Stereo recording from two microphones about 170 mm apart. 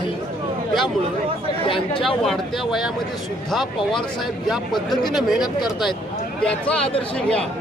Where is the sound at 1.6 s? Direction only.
30° left (ahead or behind).